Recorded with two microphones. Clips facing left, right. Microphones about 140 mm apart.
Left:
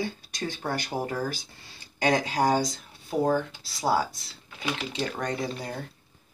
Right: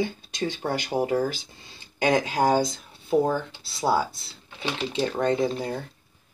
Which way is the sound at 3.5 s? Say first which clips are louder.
Right 2 dB; 25° right (ahead or behind).